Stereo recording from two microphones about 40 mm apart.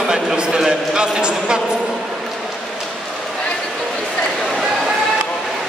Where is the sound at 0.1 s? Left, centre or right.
Centre.